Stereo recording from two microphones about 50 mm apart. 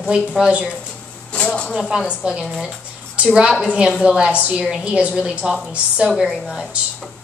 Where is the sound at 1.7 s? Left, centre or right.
Centre.